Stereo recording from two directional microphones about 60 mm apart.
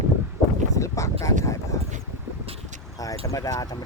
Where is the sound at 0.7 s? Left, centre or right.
Left.